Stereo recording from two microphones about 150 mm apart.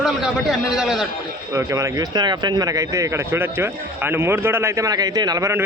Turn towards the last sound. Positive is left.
turn(degrees=-20)  # may be behind; listen again after turning